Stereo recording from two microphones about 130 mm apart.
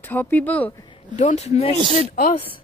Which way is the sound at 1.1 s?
60° left (ahead or behind).